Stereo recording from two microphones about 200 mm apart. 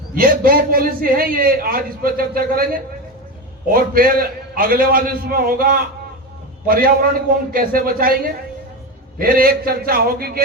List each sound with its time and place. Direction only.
0.1 s a man's voice: 45° right (ahead or behind)
3.7 s a man's voice: 45° right (ahead or behind)